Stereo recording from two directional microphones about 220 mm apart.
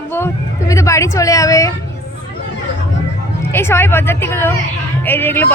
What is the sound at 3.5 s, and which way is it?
Speech, 10° left (ahead or behind).